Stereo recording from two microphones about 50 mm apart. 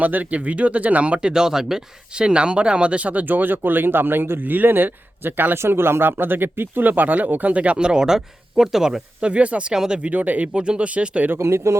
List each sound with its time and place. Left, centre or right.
0.0 s speech: right
1.3 s speech: centre
2.2 s speech: right
5.5 s speech: right; by 9.0 s centre
9.2 s speech: right
10.1 s speech: right
10.5 s speech: right
11.3 s speech: right